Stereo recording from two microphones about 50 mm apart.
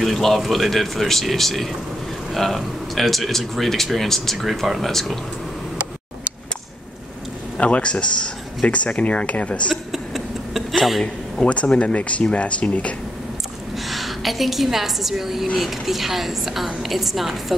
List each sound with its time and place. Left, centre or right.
0.0 s speech: centre
7.5 s speech: left
9.9 s tick-tock: centre
10.9 s a man's voice: centre
11.4 s speech: left
13.7 s a woman's voice: centre